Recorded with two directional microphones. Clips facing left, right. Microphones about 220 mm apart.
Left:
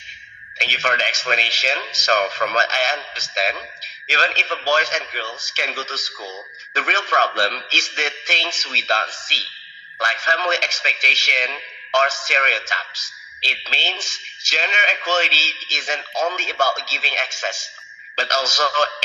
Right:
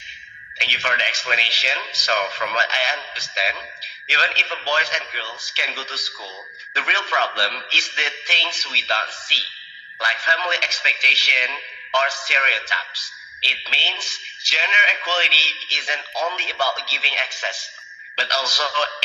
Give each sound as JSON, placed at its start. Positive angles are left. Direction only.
{"t": 0.6, "sound": "a man's voice", "side_deg": 45}